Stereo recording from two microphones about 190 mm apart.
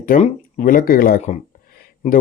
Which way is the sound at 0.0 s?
40° left (ahead or behind).